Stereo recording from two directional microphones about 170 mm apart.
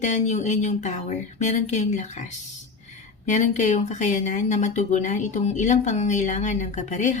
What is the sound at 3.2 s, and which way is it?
Speech, 45° left (ahead or behind).